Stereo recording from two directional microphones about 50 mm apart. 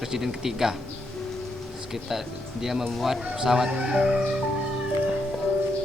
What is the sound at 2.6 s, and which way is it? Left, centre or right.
Speech, centre.